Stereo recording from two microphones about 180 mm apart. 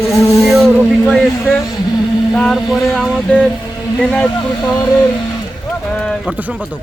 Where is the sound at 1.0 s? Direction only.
Centre (ahead or behind).